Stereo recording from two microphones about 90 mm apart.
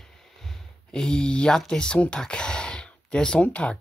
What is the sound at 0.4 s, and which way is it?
Speech, 5° left (ahead or behind).